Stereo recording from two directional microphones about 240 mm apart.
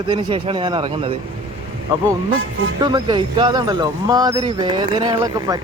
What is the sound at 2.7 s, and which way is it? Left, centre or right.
Speech, centre.